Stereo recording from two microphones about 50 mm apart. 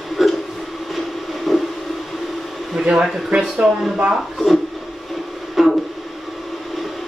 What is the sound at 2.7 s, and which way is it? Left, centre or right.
Speech, centre.